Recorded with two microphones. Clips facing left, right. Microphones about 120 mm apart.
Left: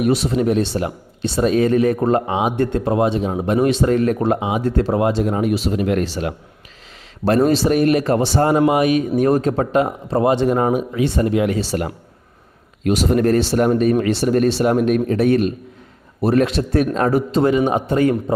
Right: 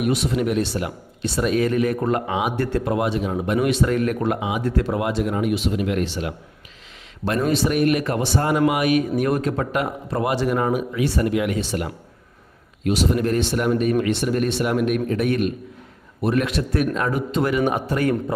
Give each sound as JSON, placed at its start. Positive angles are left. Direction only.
{"t": 0.0, "sound": "a man's voice", "side_deg": 35}